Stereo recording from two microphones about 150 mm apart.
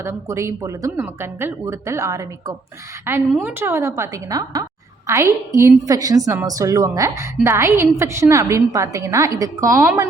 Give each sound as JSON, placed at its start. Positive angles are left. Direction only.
{"t": 0.0, "sound": "a woman's voice", "side_deg": -20}